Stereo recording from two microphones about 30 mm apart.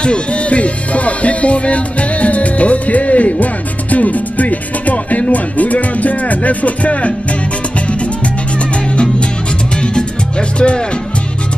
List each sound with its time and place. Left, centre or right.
0.0 s music: left
10.6 s speech: left